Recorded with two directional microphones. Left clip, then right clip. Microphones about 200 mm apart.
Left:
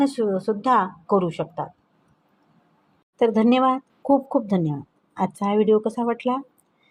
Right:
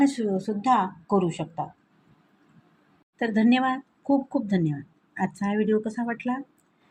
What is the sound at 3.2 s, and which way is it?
Speech, 20° left (ahead or behind).